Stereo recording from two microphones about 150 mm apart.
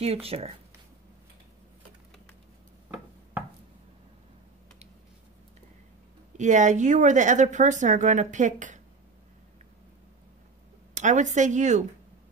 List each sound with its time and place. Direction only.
0.0 s speech: 40° right (ahead or behind)
6.3 s speech: 55° right (ahead or behind)
11.0 s speech: 55° right (ahead or behind)